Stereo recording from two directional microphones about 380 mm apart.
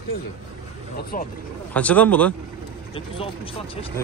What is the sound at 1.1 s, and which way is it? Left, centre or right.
Speech, left.